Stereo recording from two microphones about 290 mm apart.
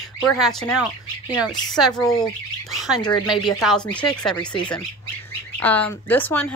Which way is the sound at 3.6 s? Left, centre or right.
Centre.